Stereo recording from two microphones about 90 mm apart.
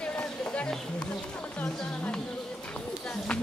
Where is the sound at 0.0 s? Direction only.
10° left (ahead or behind).